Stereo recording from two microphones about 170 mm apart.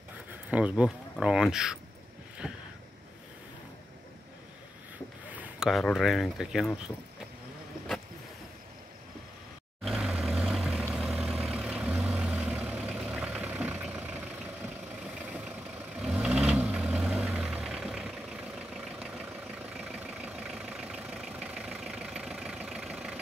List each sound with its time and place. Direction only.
0.5 s speech: 5° right (ahead or behind)
2.4 s a sound: centre (ahead or behind)
5.3 s speech: 5° right (ahead or behind)
9.8 s vehicle: centre (ahead or behind)